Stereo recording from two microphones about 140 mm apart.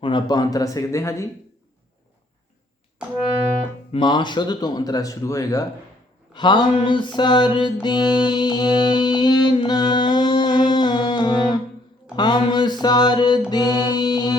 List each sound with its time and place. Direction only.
0.0 s speech: 35° left (ahead or behind)
3.9 s speech: 35° left (ahead or behind)
6.3 s a sound: 35° left (ahead or behind)
7.2 s music: 35° left (ahead or behind)
12.1 s a sound: 30° left (ahead or behind)
13.5 s music: 30° left (ahead or behind)